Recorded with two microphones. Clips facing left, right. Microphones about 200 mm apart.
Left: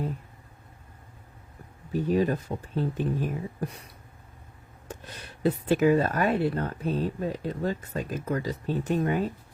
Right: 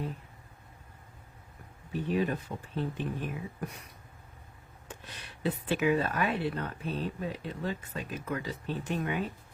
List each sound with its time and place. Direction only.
1.9 s speech: 40° left (ahead or behind)
4.9 s speech: 40° left (ahead or behind)